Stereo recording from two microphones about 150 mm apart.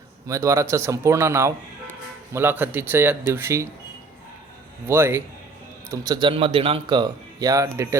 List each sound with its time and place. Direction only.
0.3 s speech: 20° right (ahead or behind)
4.9 s speech: 15° right (ahead or behind)